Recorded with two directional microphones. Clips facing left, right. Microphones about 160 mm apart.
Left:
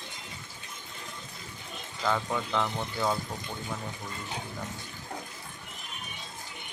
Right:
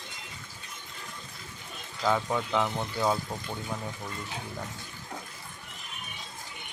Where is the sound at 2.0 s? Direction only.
5° right (ahead or behind).